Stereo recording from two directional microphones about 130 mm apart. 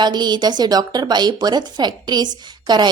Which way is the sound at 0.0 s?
35° right (ahead or behind).